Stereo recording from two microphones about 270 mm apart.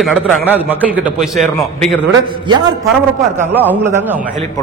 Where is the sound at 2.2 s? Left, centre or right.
Centre.